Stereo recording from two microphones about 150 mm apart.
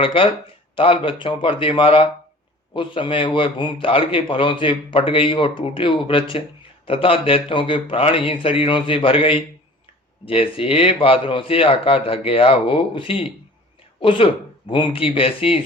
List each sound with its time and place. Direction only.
0.0 s a man's voice: 35° left (ahead or behind)